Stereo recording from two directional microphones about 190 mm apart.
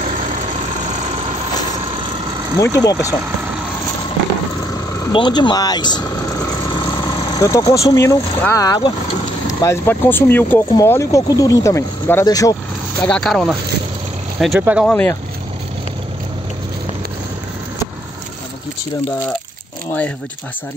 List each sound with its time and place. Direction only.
2.6 s speech: 15° left (ahead or behind)
5.1 s speech: 25° left (ahead or behind)
7.0 s vehicle: 20° left (ahead or behind)
7.9 s speech: 15° left (ahead or behind)
13.0 s speech: 5° left (ahead or behind)
14.9 s speech: 10° left (ahead or behind)